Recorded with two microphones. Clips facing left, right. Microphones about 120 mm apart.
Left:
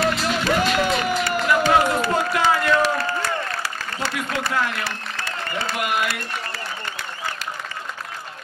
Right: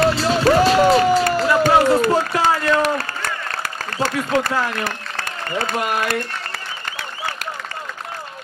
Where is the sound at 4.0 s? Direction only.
45° right (ahead or behind).